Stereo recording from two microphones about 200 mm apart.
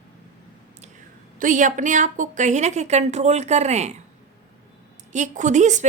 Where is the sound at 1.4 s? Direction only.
40° right (ahead or behind).